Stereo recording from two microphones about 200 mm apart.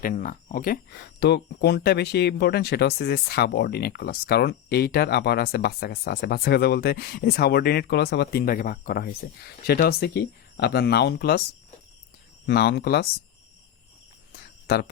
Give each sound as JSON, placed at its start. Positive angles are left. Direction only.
{"t": 0.0, "sound": "speech", "side_deg": 45}
{"t": 12.5, "sound": "speech", "side_deg": 50}